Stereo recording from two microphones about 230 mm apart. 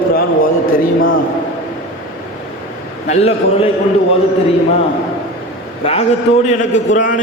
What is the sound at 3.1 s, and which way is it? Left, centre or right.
Speech, left.